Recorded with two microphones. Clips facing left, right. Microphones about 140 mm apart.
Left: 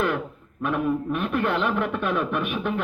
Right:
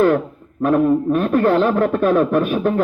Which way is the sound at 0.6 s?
40° right (ahead or behind).